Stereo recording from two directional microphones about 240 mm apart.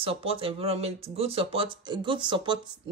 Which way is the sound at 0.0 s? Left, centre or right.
Right.